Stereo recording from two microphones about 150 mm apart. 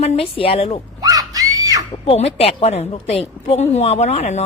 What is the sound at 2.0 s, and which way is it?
A woman's voice, 40° left (ahead or behind).